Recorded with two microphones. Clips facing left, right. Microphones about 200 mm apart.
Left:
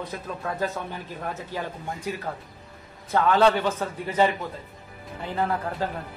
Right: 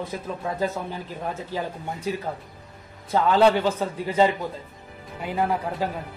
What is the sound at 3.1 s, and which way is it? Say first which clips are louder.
Speech: right 1 dB; 15° right (ahead or behind).